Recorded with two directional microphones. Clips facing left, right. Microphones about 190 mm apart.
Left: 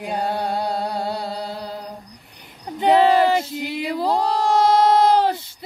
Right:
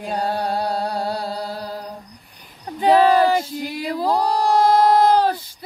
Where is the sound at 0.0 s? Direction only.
20° left (ahead or behind).